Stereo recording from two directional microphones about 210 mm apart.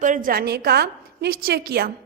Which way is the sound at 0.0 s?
40° right (ahead or behind).